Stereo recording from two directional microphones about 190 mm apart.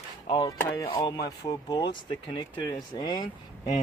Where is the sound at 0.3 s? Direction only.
25° left (ahead or behind).